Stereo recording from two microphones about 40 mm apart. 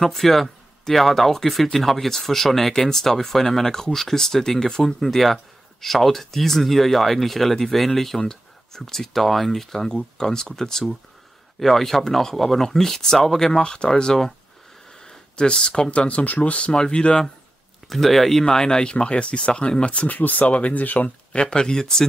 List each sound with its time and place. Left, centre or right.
0.0 s speech: centre
5.0 s speech: centre
13.6 s speech: left
15.0 s a sound: centre
15.9 s speech: left
16.7 s speech: left
17.8 s speech: centre
18.4 s speech: centre; by 20.1 s left
20.1 s speech: left
21.3 s speech: left